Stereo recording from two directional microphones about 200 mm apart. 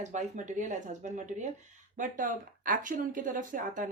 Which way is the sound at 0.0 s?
35° right (ahead or behind).